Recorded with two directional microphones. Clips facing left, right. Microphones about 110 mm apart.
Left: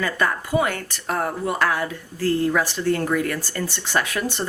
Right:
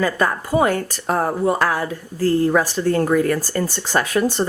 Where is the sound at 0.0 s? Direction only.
35° right (ahead or behind).